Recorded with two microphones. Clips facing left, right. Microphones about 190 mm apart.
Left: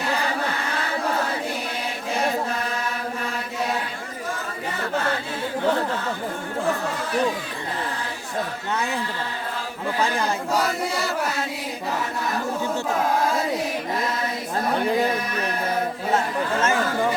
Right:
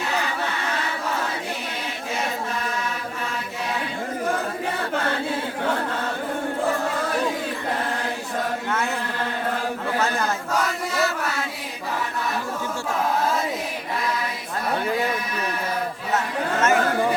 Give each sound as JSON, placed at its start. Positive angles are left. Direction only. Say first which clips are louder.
{"t": 16.1, "sound": "chatter", "louder": "even", "side_deg": 30}